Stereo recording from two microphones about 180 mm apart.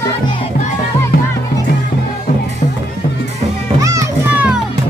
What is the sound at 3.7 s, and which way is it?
Music, 20° right (ahead or behind).